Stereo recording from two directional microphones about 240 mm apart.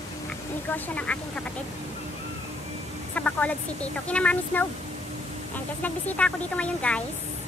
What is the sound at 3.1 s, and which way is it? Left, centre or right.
Speech, centre.